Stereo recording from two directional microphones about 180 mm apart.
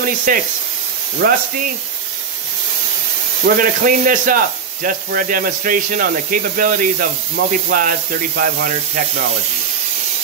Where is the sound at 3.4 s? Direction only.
50° right (ahead or behind).